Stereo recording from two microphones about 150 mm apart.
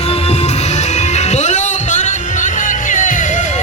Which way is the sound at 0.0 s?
45° left (ahead or behind).